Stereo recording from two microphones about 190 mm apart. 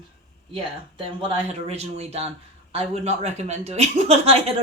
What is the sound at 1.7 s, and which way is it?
Speech, 35° right (ahead or behind).